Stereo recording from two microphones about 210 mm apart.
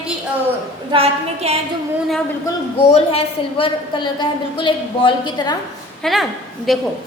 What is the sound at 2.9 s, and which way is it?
A woman's voice, 30° left (ahead or behind).